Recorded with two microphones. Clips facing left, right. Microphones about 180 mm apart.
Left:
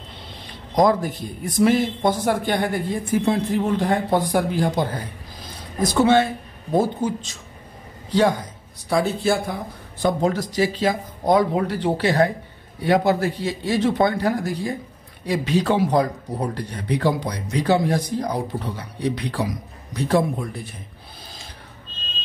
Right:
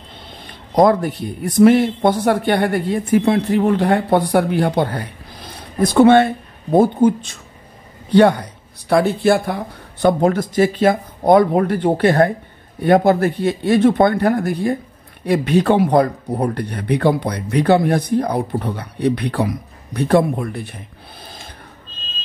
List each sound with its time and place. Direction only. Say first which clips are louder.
0.7 s speech: right 4 dB; 60° right (ahead or behind)